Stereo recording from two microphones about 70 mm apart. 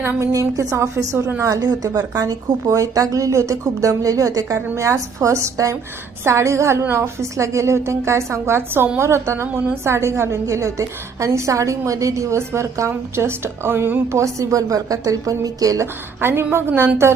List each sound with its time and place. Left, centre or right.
0.3 s speech: right
1.4 s a woman's voice: right
14.1 s speech: right
16.2 s a woman's voice: right